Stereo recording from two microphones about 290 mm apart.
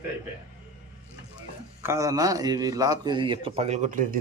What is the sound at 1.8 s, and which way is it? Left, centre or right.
Speech, centre.